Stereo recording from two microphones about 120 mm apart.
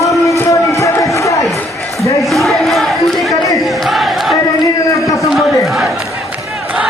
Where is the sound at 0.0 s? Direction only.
25° left (ahead or behind).